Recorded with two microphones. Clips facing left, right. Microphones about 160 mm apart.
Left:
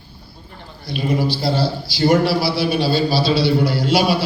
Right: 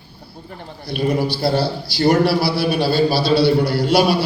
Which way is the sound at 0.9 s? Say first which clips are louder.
Right 1 dB; 60° right (ahead or behind).